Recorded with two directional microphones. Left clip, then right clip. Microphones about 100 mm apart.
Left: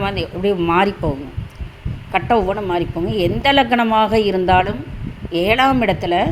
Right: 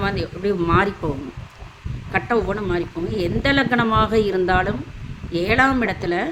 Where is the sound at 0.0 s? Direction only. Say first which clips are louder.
Left 3 dB; 35° left (ahead or behind).